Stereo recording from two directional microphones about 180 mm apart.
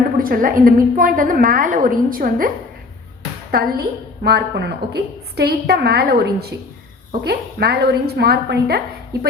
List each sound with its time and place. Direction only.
0.2 s a woman's voice: 50° right (ahead or behind)
3.5 s a woman's voice: 60° right (ahead or behind)